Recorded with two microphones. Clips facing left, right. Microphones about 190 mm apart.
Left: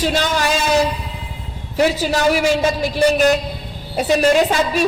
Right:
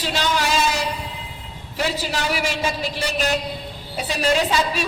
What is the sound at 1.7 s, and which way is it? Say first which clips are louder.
A woman's voice: left 8 dB; 45° left (ahead or behind).